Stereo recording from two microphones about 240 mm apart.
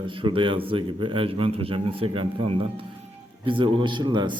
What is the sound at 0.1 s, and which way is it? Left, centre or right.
Speech, right.